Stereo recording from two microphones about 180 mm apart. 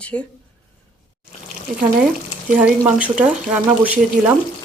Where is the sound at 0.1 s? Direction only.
10° left (ahead or behind).